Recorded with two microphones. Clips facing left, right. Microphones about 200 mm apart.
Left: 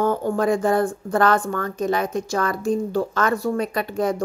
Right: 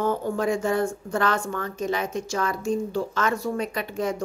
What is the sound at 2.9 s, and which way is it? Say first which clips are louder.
Speech: left 4 dB; 55° left (ahead or behind).